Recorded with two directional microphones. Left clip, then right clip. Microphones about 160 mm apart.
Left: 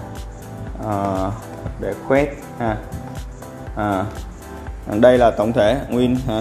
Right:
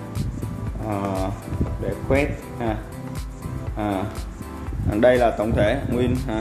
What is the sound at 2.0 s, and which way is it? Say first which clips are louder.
Speech: left 5 dB; 25° left (ahead or behind).